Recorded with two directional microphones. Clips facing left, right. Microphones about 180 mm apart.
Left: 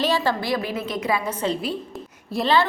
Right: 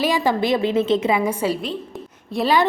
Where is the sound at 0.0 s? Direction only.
15° right (ahead or behind).